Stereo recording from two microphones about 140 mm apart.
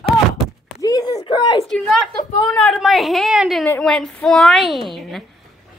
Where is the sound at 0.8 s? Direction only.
25° left (ahead or behind).